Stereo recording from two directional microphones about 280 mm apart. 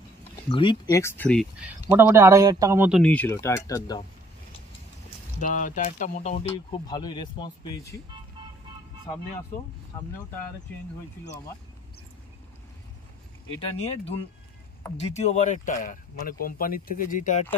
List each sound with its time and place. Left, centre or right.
0.5 s speech: centre
5.4 s speech: left; by 8.0 s centre
13.8 s speech: left